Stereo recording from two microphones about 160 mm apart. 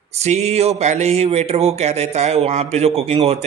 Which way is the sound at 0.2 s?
45° right (ahead or behind).